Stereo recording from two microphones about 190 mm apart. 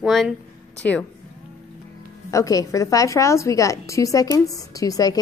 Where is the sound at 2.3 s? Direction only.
15° left (ahead or behind).